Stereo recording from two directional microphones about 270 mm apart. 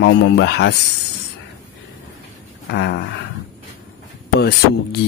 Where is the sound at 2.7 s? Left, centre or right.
Left.